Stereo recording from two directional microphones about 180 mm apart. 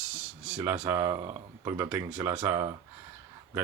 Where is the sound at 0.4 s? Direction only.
10° right (ahead or behind).